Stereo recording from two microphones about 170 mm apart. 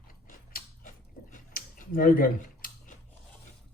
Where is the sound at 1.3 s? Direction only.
55° left (ahead or behind).